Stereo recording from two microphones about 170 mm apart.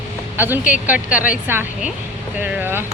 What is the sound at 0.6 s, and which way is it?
Speech, 50° left (ahead or behind).